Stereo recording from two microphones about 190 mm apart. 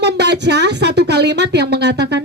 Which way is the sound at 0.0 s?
65° right (ahead or behind).